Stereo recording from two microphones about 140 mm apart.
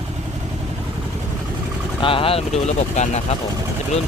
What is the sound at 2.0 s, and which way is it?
Speech, 40° left (ahead or behind).